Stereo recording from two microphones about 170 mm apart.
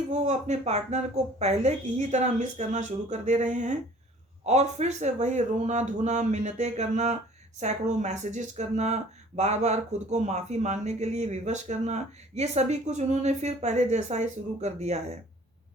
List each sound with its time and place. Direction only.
0.1 s speech: 45° right (ahead or behind)